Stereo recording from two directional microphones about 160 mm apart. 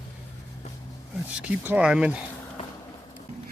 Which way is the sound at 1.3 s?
10° right (ahead or behind).